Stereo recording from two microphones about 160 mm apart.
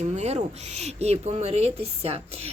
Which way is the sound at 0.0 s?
45° right (ahead or behind).